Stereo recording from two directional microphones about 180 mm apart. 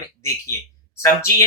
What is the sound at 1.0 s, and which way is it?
Speech, 15° left (ahead or behind).